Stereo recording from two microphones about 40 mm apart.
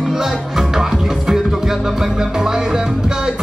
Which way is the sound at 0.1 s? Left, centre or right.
Centre.